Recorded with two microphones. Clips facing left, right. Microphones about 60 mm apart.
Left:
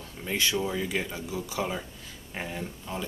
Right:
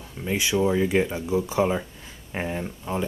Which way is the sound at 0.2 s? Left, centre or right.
Centre.